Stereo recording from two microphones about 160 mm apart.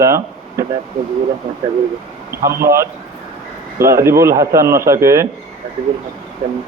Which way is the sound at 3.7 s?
15° right (ahead or behind).